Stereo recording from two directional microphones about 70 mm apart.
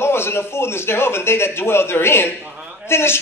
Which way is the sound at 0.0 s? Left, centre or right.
Left.